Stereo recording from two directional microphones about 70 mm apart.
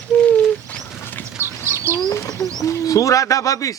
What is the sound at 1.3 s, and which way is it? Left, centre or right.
Bird, right.